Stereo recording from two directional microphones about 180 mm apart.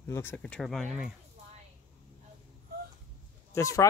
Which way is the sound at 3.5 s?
15° left (ahead or behind).